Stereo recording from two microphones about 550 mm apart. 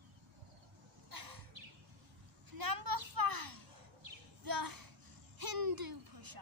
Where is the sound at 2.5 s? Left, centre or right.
Right.